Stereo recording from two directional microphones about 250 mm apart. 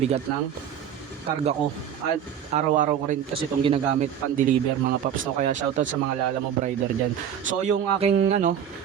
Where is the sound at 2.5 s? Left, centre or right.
Right.